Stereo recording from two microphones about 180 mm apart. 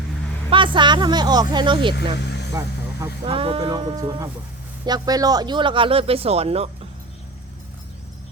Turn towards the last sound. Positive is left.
turn(degrees=-35)  # may be behind; listen again after turning